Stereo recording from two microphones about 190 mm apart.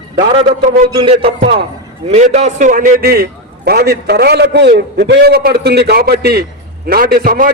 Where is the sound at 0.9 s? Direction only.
25° right (ahead or behind).